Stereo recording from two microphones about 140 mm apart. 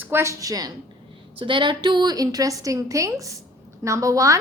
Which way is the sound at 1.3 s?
35° right (ahead or behind).